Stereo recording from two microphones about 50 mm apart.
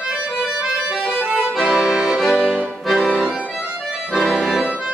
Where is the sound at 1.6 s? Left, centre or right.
Centre.